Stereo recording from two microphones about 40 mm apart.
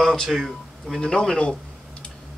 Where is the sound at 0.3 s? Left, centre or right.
Centre.